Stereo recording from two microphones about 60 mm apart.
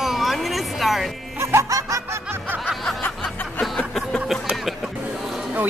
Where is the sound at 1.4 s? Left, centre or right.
Right.